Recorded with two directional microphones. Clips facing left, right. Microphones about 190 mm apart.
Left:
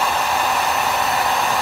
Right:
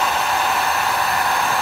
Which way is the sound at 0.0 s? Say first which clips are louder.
Even; 5° left (ahead or behind).